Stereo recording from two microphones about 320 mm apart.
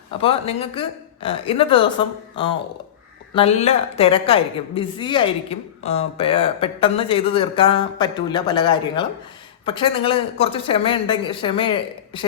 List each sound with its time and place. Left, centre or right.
0.1 s a woman's voice: centre